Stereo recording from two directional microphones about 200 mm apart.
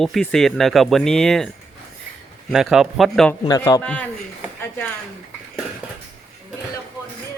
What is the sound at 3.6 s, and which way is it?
Speech, 15° left (ahead or behind).